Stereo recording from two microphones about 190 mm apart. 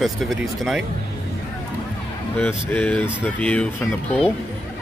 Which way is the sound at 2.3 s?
10° left (ahead or behind).